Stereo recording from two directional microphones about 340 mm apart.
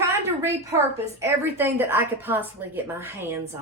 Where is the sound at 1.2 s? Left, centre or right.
Centre.